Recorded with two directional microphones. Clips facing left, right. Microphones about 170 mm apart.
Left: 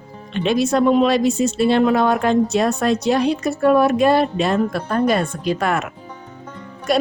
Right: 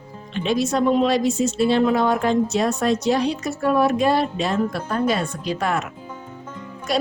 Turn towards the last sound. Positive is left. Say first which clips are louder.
# left 4 dB
turn(degrees=55)  # may be behind; listen again after turning